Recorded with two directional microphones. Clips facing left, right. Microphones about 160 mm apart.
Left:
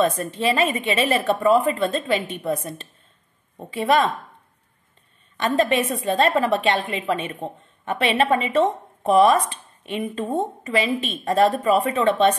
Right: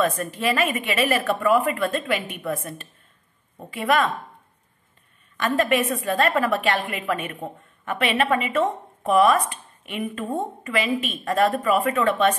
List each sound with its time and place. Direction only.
0.0 s a woman's voice: 25° left (ahead or behind)
5.4 s a woman's voice: 30° left (ahead or behind)